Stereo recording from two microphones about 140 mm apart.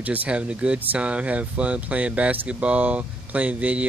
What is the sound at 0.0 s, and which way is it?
Speech, 10° right (ahead or behind).